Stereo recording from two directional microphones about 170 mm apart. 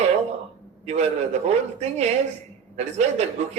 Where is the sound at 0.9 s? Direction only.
40° right (ahead or behind).